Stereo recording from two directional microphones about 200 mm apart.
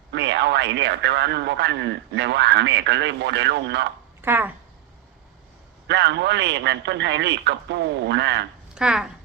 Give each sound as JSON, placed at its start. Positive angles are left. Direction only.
{"t": 0.1, "sound": "a man's voice", "side_deg": -60}
{"t": 4.2, "sound": "speech", "side_deg": -10}
{"t": 5.9, "sound": "a man's voice", "side_deg": -60}
{"t": 8.7, "sound": "speech", "side_deg": -5}